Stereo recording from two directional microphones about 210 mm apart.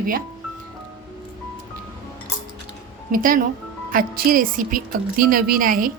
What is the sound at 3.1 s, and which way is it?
A woman's voice, 40° right (ahead or behind).